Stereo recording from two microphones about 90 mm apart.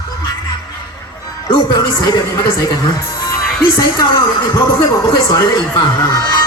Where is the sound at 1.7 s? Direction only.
45° left (ahead or behind).